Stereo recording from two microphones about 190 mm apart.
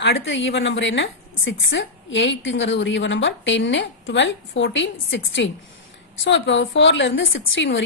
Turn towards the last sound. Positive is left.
turn(degrees=75)  # may be behind; listen again after turning